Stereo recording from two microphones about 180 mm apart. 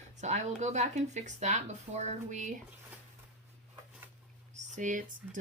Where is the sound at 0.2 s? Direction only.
40° right (ahead or behind).